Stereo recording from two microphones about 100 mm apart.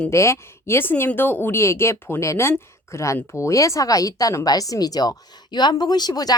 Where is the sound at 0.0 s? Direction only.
30° left (ahead or behind).